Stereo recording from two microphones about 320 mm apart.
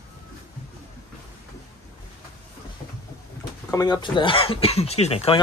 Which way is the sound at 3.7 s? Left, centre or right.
Centre.